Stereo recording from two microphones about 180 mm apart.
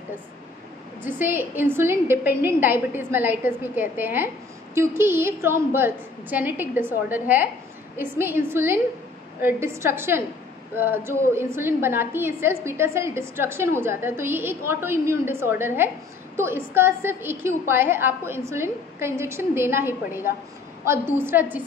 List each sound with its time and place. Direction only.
1.0 s a woman's voice: 10° right (ahead or behind)